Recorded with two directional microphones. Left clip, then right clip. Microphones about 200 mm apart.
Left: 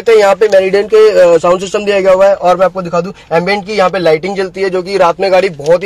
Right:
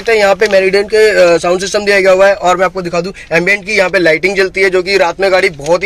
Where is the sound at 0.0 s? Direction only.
10° left (ahead or behind).